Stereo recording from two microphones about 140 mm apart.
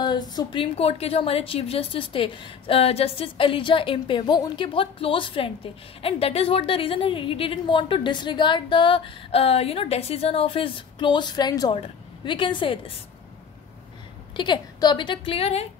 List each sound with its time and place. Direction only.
0.0 s a woman's voice: 30° left (ahead or behind)
11.7 s a woman's voice: 40° left (ahead or behind)
14.3 s a woman's voice: 35° left (ahead or behind)